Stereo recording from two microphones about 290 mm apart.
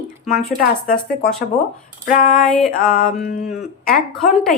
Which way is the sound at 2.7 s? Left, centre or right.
Left.